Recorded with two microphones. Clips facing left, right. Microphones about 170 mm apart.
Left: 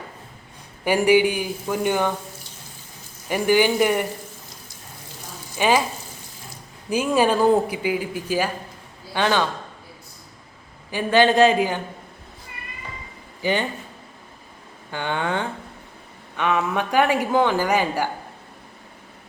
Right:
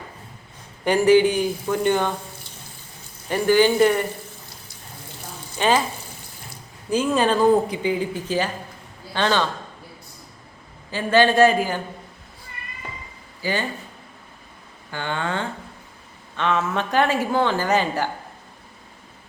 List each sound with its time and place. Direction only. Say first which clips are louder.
0.9 s speech: right 2 dB; 10° left (ahead or behind)
3.2 s speech: right 1 dB; 15° left (ahead or behind)
5.5 s speech: even; 10° left (ahead or behind)
6.9 s speech: even; 10° left (ahead or behind)
10.9 s speech: even; 15° left (ahead or behind)
13.4 s speech: left 3 dB; 20° left (ahead or behind)
14.9 s speech: left 2 dB; 15° left (ahead or behind)